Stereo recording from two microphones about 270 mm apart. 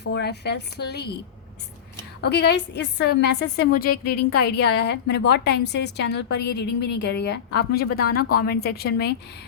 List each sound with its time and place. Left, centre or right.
0.0 s a woman's voice: left
2.2 s a woman's voice: left
4.0 s a woman's voice: left
4.3 s a woman's voice: left